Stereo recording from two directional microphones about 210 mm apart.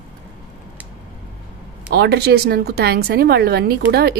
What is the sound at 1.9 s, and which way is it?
A woman's voice, 50° right (ahead or behind).